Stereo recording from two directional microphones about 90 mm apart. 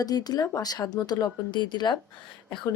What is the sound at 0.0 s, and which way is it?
A woman's voice, 45° left (ahead or behind).